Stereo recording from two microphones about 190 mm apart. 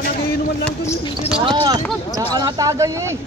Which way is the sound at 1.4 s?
25° right (ahead or behind).